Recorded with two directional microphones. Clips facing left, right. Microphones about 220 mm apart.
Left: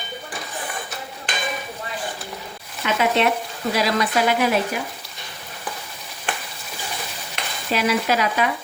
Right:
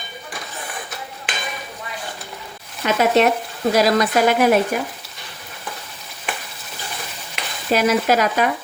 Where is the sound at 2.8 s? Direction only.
45° right (ahead or behind).